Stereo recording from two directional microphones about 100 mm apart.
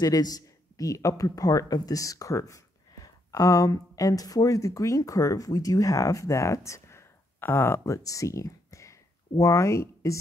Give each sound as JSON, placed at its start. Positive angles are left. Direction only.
{"t": 0.0, "sound": "speech", "side_deg": 40}